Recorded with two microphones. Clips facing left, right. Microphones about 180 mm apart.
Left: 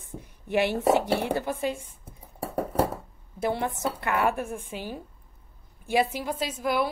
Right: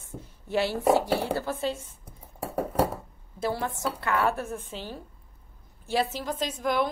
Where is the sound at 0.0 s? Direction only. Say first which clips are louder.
Left 1 dB; 15° left (ahead or behind).